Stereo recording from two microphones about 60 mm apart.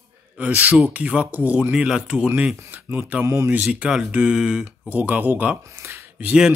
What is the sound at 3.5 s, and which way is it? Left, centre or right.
Speech, right.